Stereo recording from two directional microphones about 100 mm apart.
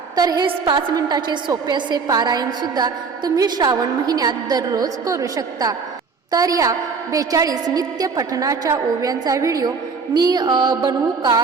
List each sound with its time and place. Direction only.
0.2 s a woman's voice: 40° right (ahead or behind)
0.4 s music: 50° right (ahead or behind)
0.9 s a woman's voice: 45° right (ahead or behind)
10.2 s music: 40° right (ahead or behind)